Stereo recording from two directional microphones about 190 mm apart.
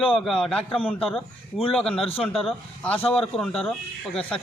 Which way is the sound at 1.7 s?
5° left (ahead or behind).